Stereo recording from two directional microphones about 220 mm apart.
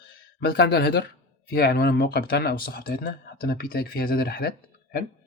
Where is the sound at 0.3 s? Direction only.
45° left (ahead or behind).